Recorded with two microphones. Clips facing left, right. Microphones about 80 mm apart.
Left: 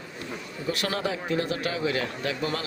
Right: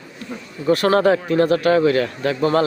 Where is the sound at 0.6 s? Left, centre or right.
Right.